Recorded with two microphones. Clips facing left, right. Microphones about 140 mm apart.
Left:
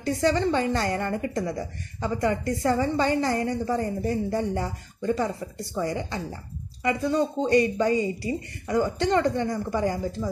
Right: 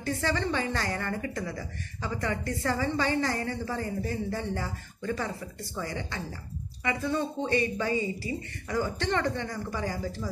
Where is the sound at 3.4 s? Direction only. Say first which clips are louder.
Left 7 dB; 40° left (ahead or behind).